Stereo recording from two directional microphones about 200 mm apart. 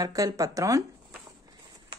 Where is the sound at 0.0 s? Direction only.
15° right (ahead or behind).